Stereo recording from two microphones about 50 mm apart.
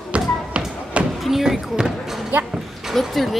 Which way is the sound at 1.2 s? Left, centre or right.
Centre.